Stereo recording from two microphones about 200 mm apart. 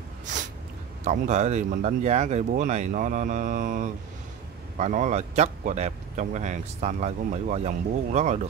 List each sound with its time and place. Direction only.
1.0 s speech: 35° right (ahead or behind)